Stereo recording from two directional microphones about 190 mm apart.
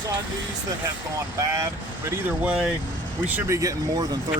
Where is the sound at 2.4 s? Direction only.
5° right (ahead or behind).